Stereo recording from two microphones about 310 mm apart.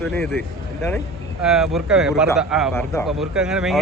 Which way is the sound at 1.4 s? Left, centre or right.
Centre.